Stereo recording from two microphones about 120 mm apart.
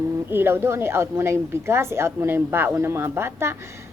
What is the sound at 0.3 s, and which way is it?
A woman's voice, 20° right (ahead or behind).